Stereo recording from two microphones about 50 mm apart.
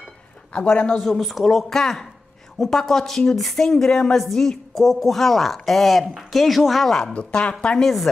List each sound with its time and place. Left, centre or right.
0.5 s a woman's voice: left
0.9 s a woman's voice: centre
7.2 s a woman's voice: left
7.8 s a woman's voice: centre